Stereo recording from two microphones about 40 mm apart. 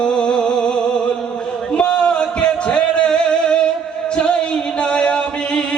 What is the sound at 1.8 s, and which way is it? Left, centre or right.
Music, left.